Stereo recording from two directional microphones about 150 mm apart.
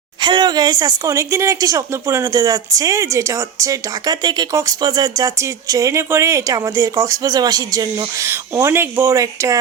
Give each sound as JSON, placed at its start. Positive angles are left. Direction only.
{"t": 0.2, "sound": "speech", "side_deg": -30}